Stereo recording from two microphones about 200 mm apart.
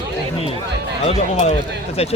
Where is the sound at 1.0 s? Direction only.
30° left (ahead or behind).